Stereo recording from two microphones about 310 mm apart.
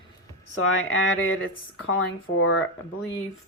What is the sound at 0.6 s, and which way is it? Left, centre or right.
Speech, left.